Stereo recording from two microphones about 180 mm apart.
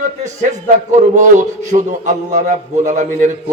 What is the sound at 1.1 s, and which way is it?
Speech, 45° right (ahead or behind).